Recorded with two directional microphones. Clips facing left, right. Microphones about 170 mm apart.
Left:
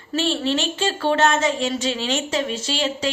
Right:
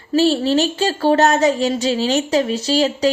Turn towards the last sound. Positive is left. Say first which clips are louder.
# right 7 dB
turn(degrees=-35)  # may be behind; listen again after turning